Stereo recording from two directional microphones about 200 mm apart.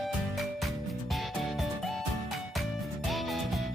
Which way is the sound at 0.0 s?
Centre (ahead or behind).